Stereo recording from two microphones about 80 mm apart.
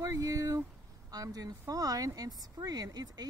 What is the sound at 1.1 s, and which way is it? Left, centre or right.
Speech, right.